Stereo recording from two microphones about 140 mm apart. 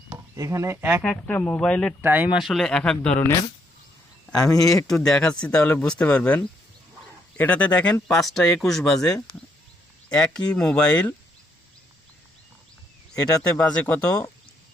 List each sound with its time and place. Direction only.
0.3 s speech: 20° right (ahead or behind)
1.0 s speech: 10° left (ahead or behind)
2.0 s speech: 15° right (ahead or behind); by 3.2 s 5° left (ahead or behind)
4.4 s speech: 25° left (ahead or behind)
4.9 s speech: 5° left (ahead or behind)
13.1 s speech: 25° left (ahead or behind)